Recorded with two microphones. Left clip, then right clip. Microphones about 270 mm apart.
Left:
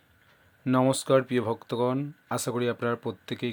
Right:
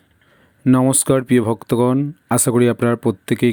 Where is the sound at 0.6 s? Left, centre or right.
Right.